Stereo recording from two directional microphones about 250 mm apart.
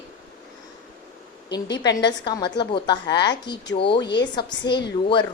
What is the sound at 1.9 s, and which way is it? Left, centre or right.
A woman's voice, centre.